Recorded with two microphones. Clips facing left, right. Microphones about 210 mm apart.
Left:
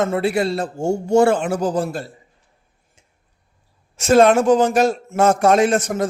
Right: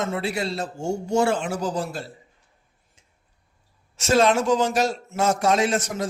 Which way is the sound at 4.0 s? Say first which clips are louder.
Left 6 dB; 55° left (ahead or behind).